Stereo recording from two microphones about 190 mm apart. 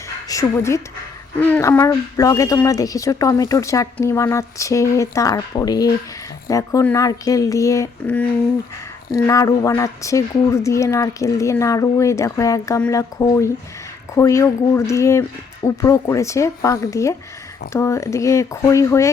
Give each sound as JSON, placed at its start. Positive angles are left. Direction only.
{"t": 0.3, "sound": "speech", "side_deg": 15}